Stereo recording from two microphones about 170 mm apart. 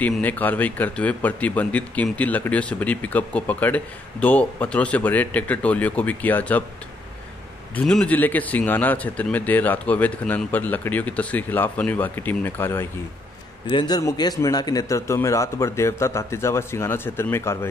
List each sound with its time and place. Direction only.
0.0 s speech: 10° left (ahead or behind)
7.7 s speech: 5° left (ahead or behind)
13.7 s speech: 25° left (ahead or behind)